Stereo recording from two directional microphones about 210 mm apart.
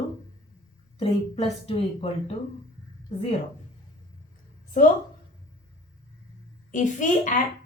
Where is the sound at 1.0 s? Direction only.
30° left (ahead or behind).